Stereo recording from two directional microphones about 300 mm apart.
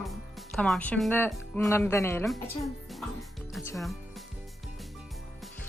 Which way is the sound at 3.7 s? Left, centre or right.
Centre.